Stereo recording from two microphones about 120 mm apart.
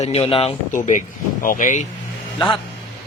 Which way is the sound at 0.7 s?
90° left.